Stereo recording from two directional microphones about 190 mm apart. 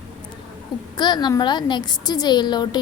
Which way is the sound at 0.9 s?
20° left (ahead or behind).